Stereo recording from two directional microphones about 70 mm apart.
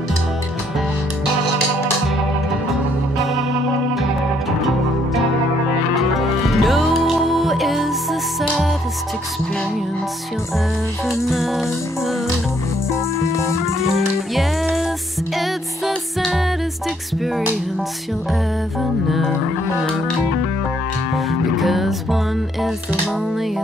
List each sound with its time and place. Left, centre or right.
6.1 s music: centre
11.1 s music: centre
12.9 s music: left
13.9 s music: centre
18.8 s music: centre
21.5 s music: centre